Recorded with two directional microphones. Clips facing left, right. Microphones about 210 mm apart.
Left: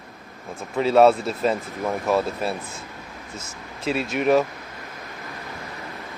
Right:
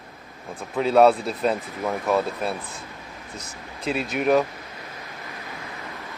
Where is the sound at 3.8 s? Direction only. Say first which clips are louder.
Left 1 dB; centre (ahead or behind).